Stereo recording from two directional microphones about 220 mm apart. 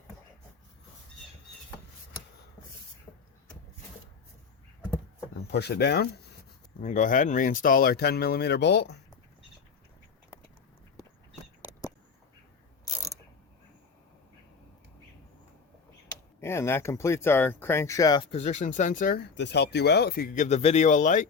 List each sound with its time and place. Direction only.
3.1 s a sound: 10° left (ahead or behind)
5.5 s speech: 50° left (ahead or behind)
6.7 s speech: 35° left (ahead or behind)
16.4 s speech: 10° left (ahead or behind); by 21.2 s 35° left (ahead or behind)